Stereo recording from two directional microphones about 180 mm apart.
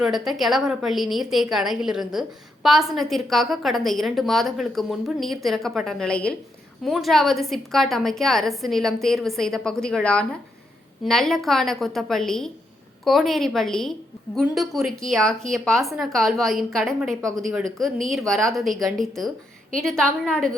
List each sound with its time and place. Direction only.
0.0 s a woman's voice: centre (ahead or behind)